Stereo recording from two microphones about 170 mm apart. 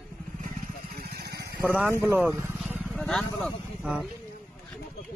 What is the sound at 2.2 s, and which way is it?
Speech, 10° right (ahead or behind).